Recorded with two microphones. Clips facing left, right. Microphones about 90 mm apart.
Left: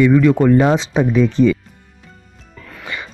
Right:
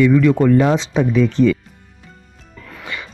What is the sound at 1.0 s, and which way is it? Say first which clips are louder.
Speech: left 1 dB; 15° left (ahead or behind).